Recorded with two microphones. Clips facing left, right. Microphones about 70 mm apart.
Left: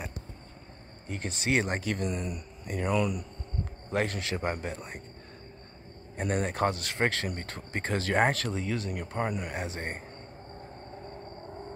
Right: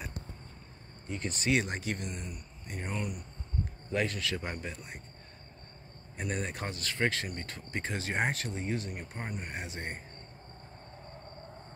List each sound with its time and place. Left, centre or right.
1.0 s speech: left
1.5 s speech: left
2.0 s speech: left
3.9 s speech: left
4.2 s a man's voice: left
4.5 s speech: left
6.2 s speech: left
9.7 s speech: left